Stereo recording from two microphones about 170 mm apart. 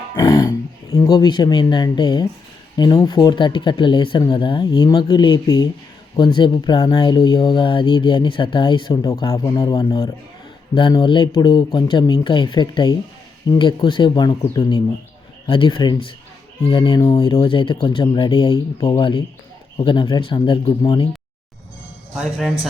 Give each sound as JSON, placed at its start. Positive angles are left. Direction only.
{"t": 0.2, "sound": "speech", "side_deg": 25}
{"t": 22.1, "sound": "a man's voice", "side_deg": 0}